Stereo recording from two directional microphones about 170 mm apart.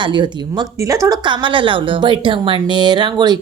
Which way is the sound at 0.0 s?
25° right (ahead or behind).